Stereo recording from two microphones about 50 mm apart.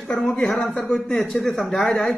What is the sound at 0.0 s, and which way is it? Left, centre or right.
A man's voice, centre.